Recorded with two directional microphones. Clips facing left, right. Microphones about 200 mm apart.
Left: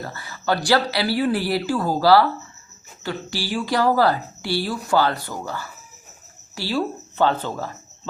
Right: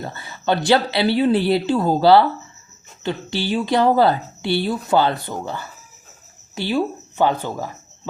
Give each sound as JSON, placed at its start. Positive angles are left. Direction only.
{"t": 0.0, "sound": "speech", "side_deg": -25}